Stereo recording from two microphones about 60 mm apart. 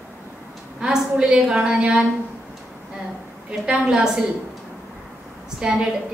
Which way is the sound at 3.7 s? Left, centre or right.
Centre.